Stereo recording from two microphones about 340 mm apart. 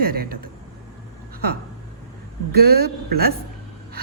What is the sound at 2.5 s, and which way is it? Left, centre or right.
Speech, right.